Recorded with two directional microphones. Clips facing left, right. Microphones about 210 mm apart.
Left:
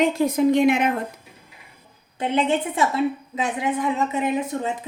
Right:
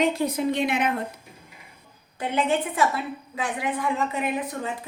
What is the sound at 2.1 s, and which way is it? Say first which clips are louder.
A woman's voice: left 3 dB; 25° left (ahead or behind).